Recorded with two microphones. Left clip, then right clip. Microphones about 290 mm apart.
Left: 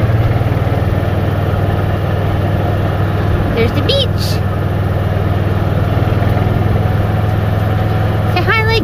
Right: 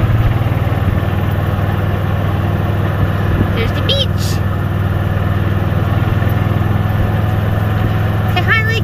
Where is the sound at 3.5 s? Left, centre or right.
Centre.